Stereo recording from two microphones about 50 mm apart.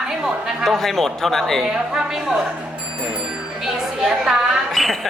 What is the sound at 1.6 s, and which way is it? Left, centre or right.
Speech, centre.